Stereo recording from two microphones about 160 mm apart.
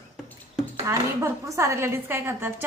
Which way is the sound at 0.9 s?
20° right (ahead or behind).